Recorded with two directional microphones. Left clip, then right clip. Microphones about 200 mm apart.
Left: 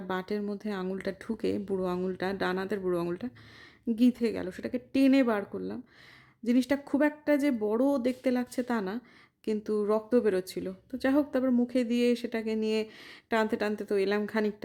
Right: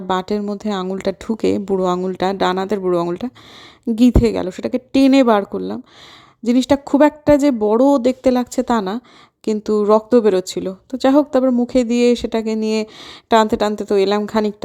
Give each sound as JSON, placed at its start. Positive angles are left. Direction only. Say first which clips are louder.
{"t": 0.1, "sound": "speech", "louder": "right 13 dB", "side_deg": -35}